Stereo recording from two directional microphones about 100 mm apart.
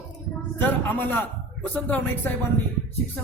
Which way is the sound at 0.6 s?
20° left (ahead or behind).